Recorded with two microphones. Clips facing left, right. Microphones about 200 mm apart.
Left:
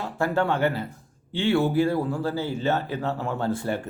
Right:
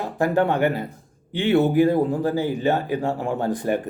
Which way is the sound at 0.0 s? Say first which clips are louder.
Right 4 dB; 15° right (ahead or behind).